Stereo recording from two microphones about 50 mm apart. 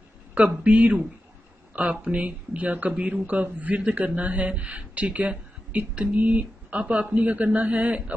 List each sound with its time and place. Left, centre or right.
0.3 s a man's voice: right